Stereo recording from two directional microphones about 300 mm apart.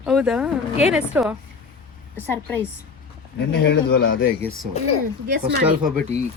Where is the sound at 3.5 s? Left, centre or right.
Left.